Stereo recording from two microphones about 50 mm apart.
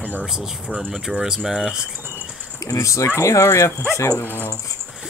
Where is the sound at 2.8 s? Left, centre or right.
Left.